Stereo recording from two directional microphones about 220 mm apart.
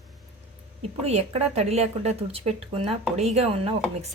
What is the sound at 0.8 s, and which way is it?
Speech, 30° right (ahead or behind).